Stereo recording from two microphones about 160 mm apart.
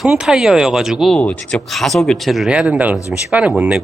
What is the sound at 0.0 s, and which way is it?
Speech, centre (ahead or behind).